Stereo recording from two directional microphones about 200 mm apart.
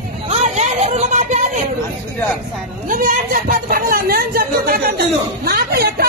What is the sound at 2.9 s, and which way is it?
Speech, 45° right (ahead or behind).